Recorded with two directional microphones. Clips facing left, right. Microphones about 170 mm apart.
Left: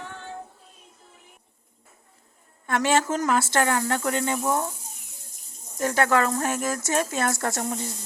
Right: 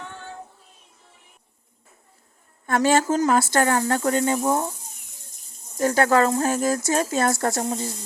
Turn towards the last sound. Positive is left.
turn(degrees=-35)  # may be behind; listen again after turning